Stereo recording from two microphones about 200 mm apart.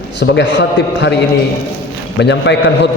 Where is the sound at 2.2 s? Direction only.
60° left (ahead or behind).